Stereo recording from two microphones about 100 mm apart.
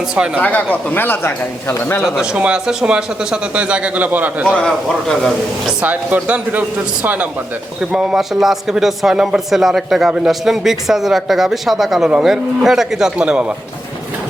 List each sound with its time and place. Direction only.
0.3 s speech: 15° left (ahead or behind)
2.0 s speech: 5° right (ahead or behind)
4.4 s a man's voice: 5° left (ahead or behind)
5.8 s speech: 15° right (ahead or behind)
7.8 s a man's voice: 5° right (ahead or behind)